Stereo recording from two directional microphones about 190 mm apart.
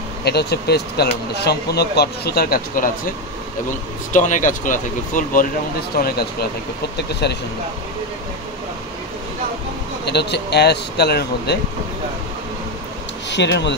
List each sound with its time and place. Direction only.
0.2 s speech: 60° left (ahead or behind)
10.0 s speech: 60° left (ahead or behind)
13.3 s speech: 65° left (ahead or behind)